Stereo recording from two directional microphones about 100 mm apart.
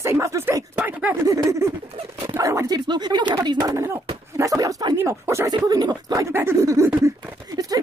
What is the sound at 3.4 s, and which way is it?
Speech, 35° right (ahead or behind).